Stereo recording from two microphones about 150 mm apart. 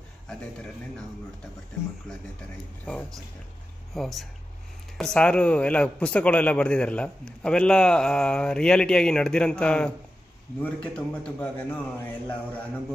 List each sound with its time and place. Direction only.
2.8 s a man's voice: 10° left (ahead or behind)
3.9 s a man's voice: centre (ahead or behind)